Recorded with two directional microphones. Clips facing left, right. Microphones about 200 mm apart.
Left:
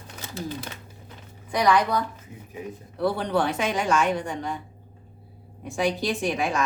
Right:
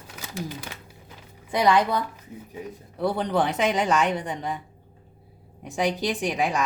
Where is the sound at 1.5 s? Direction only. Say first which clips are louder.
Right 1 dB; 25° right (ahead or behind).